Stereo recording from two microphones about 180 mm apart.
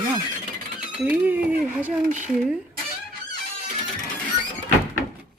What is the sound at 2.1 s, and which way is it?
Speech, 40° right (ahead or behind).